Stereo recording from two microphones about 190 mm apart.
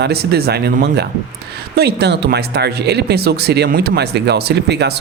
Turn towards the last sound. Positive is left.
turn(degrees=-60)  # may be behind; listen again after turning